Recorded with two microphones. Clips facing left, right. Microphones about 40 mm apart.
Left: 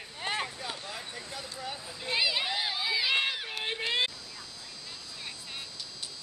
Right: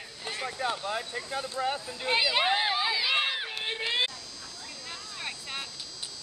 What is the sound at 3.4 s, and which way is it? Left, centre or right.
Run, centre.